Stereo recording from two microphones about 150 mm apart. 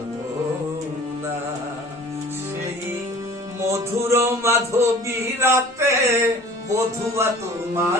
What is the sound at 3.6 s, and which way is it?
Speech, 20° right (ahead or behind).